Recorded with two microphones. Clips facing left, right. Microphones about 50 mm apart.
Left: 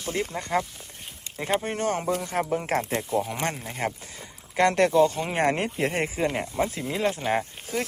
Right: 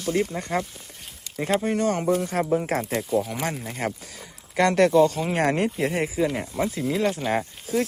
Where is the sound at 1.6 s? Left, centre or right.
Left.